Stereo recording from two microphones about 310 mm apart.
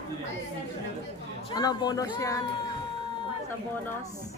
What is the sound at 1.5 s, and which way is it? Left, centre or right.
Speech, centre.